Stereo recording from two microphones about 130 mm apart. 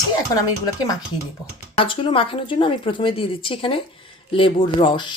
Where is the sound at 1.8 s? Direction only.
40° left (ahead or behind).